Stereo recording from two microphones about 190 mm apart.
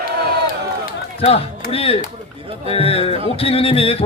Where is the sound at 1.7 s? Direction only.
30° left (ahead or behind).